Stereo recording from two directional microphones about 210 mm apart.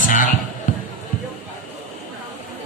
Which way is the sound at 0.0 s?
40° left (ahead or behind).